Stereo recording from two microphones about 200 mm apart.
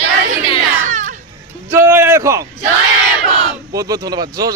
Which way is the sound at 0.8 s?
40° right (ahead or behind).